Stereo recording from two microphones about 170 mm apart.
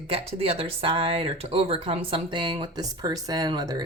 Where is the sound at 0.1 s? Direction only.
35° right (ahead or behind).